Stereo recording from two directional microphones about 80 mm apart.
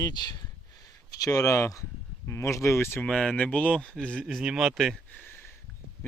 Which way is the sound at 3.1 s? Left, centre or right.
Centre.